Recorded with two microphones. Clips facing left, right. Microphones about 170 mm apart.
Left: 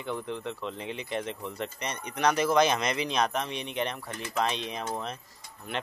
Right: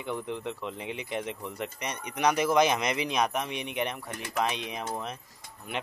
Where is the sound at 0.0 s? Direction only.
15° right (ahead or behind).